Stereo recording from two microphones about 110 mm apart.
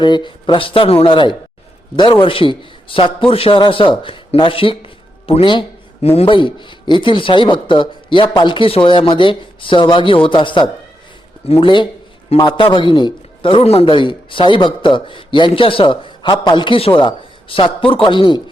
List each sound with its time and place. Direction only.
0.0 s a man's voice: 45° left (ahead or behind)
6.0 s a man's voice: 65° left (ahead or behind); by 10.7 s 45° left (ahead or behind)
11.4 s a man's voice: 55° left (ahead or behind)